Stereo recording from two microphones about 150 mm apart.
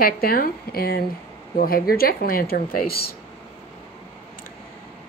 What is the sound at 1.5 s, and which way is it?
Speech, 75° left (ahead or behind).